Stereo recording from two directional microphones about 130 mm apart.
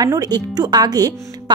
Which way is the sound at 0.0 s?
30° right (ahead or behind).